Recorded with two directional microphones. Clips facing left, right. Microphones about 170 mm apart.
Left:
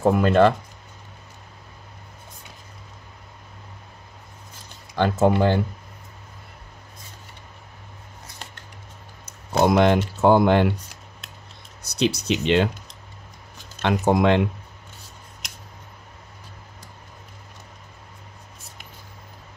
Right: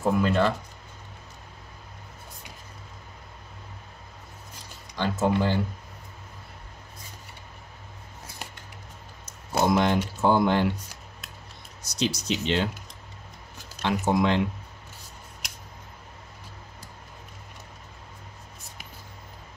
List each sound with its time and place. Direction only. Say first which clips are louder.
0.0 s speech: left 6 dB; 60° left (ahead or behind)
4.9 s speech: left 6 dB; 60° left (ahead or behind)
9.7 s speech: left 5 dB; 65° left (ahead or behind)
11.9 s speech: left 5 dB; 60° left (ahead or behind)
13.8 s speech: left 5 dB; 60° left (ahead or behind)